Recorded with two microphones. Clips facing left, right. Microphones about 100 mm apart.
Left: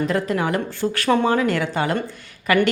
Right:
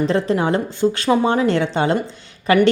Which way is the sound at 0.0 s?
30° right (ahead or behind).